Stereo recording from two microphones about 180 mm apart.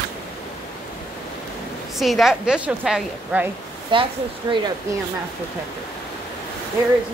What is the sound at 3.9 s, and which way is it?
Speech, 25° right (ahead or behind).